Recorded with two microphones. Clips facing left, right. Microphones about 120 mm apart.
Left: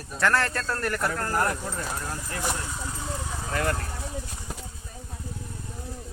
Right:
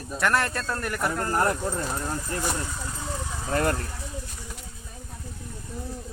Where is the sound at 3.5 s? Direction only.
40° right (ahead or behind).